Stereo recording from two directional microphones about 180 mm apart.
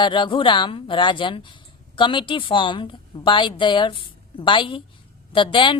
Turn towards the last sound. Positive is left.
turn(degrees=25)  # may be behind; listen again after turning